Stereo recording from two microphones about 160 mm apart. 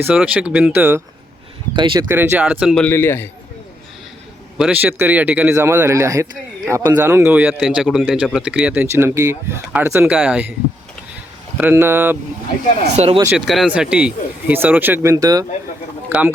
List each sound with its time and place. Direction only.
0.0 s speech: 10° right (ahead or behind)
1.7 s speech: 30° right (ahead or behind)
2.0 s speech: 15° right (ahead or behind)
2.7 s a man's voice: 10° left (ahead or behind)
4.5 s speech: 5° right (ahead or behind)
11.5 s speech: 10° right (ahead or behind)
13.2 s speech: 5° right (ahead or behind); by 15.4 s 20° right (ahead or behind)
16.0 s speech: 10° right (ahead or behind)